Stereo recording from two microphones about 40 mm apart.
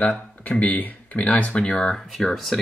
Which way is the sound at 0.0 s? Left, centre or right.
Left.